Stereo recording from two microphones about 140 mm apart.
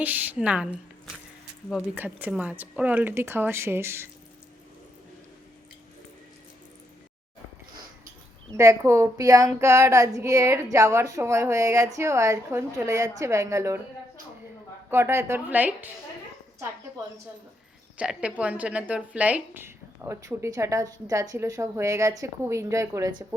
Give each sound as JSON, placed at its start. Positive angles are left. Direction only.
{"t": 0.0, "sound": "speech", "side_deg": -10}
{"t": 8.5, "sound": "speech", "side_deg": -20}
{"t": 14.8, "sound": "speech", "side_deg": -15}
{"t": 17.9, "sound": "speech", "side_deg": -10}